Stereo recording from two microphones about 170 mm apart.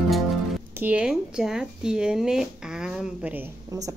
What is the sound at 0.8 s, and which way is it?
Speech, 5° right (ahead or behind).